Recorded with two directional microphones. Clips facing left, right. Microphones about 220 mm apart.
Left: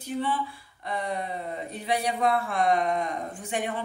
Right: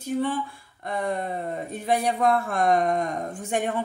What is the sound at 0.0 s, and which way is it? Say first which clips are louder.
Speech: right 3 dB; 45° right (ahead or behind).